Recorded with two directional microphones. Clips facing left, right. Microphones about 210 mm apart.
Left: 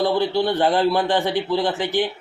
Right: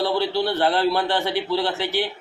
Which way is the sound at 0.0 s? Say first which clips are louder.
Left 2 dB; 15° left (ahead or behind).